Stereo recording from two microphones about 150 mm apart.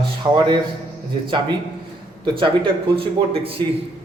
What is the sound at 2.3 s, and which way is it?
Speech, 35° right (ahead or behind).